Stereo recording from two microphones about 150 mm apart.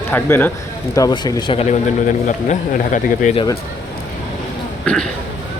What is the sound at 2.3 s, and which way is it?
Speech, 55° left (ahead or behind).